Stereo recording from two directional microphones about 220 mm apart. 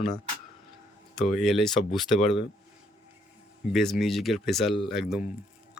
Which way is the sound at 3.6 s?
Centre (ahead or behind).